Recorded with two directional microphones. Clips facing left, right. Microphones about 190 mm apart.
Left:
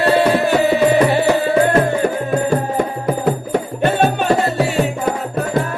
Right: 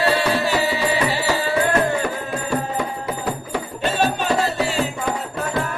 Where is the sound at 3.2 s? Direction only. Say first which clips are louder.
Left 8 dB; 55° left (ahead or behind).